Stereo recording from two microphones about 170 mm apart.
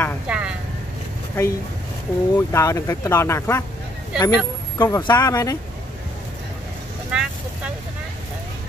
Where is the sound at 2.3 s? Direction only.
20° left (ahead or behind).